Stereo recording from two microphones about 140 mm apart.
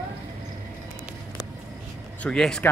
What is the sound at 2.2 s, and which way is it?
Speech, 5° left (ahead or behind).